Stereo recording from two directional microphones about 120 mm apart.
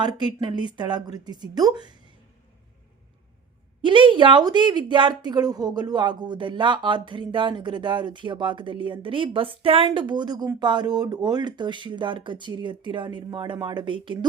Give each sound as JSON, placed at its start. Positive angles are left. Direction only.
{"t": 0.0, "sound": "speech", "side_deg": -35}
{"t": 3.8, "sound": "speech", "side_deg": -40}